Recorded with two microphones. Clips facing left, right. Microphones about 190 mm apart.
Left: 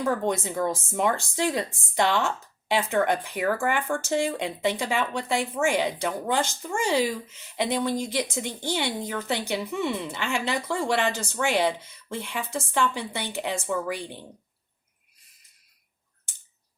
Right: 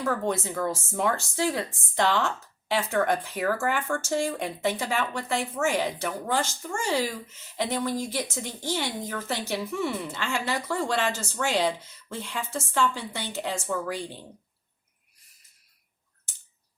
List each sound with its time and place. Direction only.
0.0 s speech: 20° left (ahead or behind)